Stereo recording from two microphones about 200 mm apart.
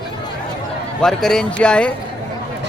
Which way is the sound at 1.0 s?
Centre (ahead or behind).